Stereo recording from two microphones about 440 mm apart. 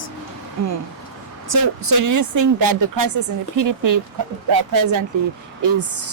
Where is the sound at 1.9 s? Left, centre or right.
Right.